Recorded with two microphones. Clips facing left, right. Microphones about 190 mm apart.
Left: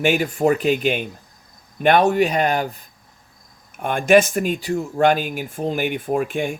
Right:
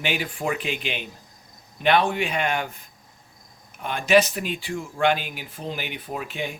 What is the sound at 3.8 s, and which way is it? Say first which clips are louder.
Speech: left 5 dB; 50° left (ahead or behind).